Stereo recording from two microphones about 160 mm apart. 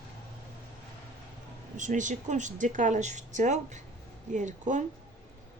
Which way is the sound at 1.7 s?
50° right (ahead or behind).